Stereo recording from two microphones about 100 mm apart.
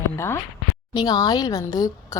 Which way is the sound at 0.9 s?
40° left (ahead or behind).